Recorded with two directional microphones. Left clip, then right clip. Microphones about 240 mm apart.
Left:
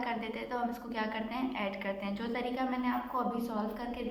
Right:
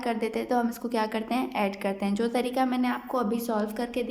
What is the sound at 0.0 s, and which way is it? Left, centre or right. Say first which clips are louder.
A woman's voice: right 7 dB; right.